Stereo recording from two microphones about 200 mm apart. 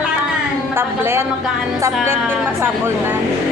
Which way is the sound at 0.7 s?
10° right (ahead or behind).